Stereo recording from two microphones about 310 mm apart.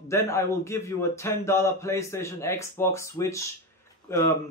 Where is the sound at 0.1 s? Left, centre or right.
Centre.